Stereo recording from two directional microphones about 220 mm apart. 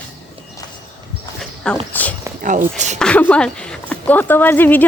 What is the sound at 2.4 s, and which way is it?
Speech, 35° right (ahead or behind).